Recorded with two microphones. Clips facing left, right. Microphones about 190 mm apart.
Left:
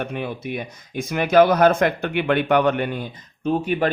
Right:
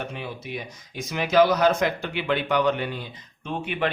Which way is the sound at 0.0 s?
55° left (ahead or behind).